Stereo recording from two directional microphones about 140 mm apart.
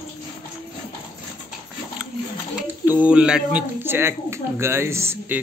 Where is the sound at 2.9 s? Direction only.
10° right (ahead or behind).